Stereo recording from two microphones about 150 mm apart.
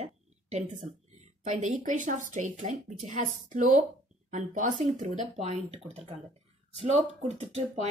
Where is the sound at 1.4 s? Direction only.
60° right (ahead or behind).